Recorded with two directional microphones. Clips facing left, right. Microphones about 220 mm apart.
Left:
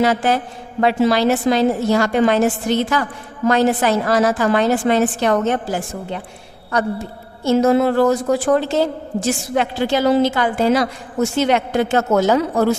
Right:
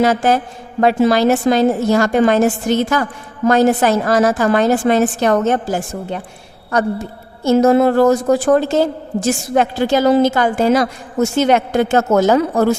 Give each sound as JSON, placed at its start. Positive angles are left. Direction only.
{"t": 0.0, "sound": "a woman's voice", "side_deg": -45}
{"t": 7.4, "sound": "a woman's voice", "side_deg": -45}